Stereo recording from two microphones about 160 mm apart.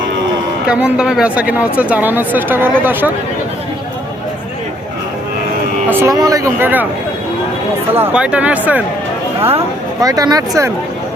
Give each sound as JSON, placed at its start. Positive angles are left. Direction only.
{"t": 0.7, "sound": "speech", "side_deg": -5}
{"t": 5.9, "sound": "speech", "side_deg": -15}
{"t": 7.9, "sound": "speech", "side_deg": -10}
{"t": 10.0, "sound": "speech", "side_deg": -25}